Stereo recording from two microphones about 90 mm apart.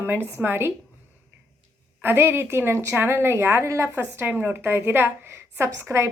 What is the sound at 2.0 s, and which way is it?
A woman's voice, 25° right (ahead or behind).